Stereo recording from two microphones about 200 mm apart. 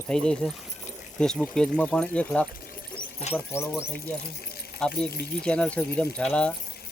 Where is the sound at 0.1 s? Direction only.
5° left (ahead or behind).